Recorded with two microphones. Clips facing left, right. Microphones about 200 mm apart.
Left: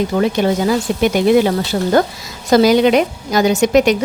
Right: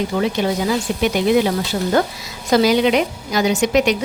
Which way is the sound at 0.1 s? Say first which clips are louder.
Left 4 dB; 50° left (ahead or behind).